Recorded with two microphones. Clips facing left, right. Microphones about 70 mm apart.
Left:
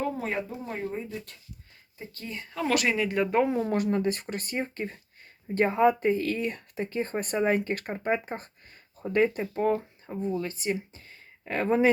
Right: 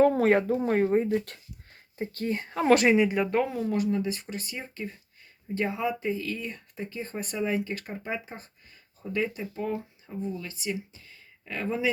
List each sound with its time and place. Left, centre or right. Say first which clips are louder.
0.0 s speech: right 10 dB; right
2.0 s speech: right 9 dB; right
2.9 s speech: right 6 dB; centre
3.4 s speech: left 4 dB; left
3.8 s speech: left 2 dB; left